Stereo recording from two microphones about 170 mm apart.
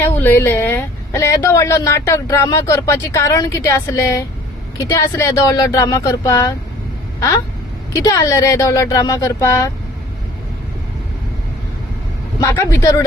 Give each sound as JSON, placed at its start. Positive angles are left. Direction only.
{"t": 0.0, "sound": "a woman's voice", "side_deg": 10}
{"t": 7.9, "sound": "speech", "side_deg": 20}
{"t": 12.4, "sound": "speech", "side_deg": 20}